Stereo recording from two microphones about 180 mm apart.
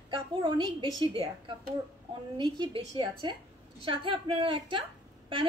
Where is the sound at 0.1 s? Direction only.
25° right (ahead or behind).